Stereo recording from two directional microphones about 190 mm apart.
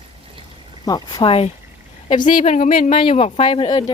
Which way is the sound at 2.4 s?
35° left (ahead or behind).